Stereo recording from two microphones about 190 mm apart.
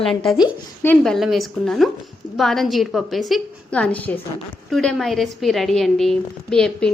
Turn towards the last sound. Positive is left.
turn(degrees=5)  # may be behind; listen again after turning